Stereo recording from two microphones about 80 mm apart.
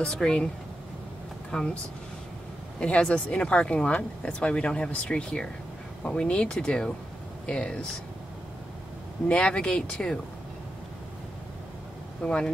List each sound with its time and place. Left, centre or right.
0.0 s speech: centre
1.5 s speech: centre
2.8 s speech: centre
9.3 s speech: centre
12.2 s speech: centre